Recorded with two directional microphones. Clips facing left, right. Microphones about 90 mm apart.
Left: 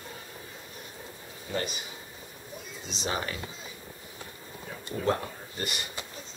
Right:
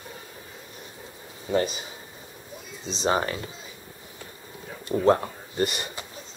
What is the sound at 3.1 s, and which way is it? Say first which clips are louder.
Speech: right 7 dB; 40° right (ahead or behind).